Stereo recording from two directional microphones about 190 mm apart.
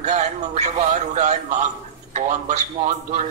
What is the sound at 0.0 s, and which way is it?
A man's voice, 35° right (ahead or behind).